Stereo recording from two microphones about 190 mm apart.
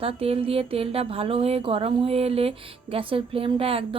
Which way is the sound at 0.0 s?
30° right (ahead or behind).